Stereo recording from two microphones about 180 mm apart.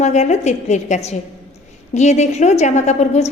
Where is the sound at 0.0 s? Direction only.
40° left (ahead or behind).